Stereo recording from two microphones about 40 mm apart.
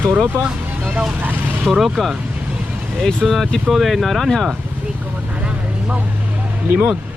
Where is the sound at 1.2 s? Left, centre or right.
Right.